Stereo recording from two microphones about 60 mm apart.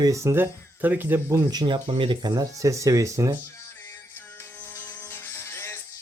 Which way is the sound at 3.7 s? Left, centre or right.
Left.